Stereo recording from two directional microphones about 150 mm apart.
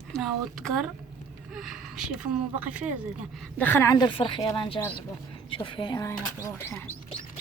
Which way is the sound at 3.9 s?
30° left (ahead or behind).